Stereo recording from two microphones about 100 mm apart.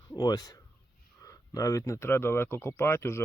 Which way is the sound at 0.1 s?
40° left (ahead or behind).